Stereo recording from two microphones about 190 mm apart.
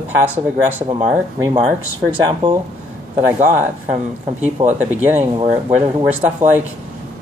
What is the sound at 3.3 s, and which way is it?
Speech, 40° right (ahead or behind).